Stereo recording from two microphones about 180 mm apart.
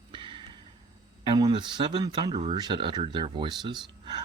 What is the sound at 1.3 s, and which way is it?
Speech, 25° right (ahead or behind).